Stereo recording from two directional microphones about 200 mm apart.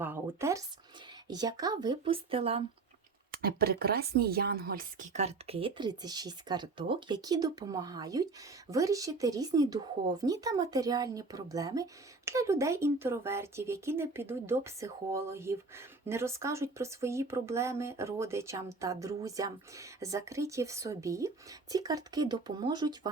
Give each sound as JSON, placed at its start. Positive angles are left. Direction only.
{"t": 0.0, "sound": "speech", "side_deg": -10}
{"t": 3.4, "sound": "speech", "side_deg": -50}